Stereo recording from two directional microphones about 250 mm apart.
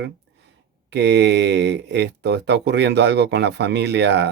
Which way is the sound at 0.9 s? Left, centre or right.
Right.